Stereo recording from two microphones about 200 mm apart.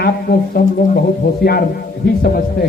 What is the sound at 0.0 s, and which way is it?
A woman's voice, 50° left (ahead or behind).